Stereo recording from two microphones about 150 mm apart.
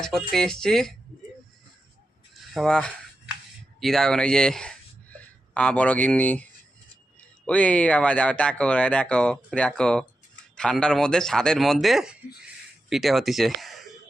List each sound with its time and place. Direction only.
0.0 s speech: centre (ahead or behind)
2.5 s speech: 5° left (ahead or behind)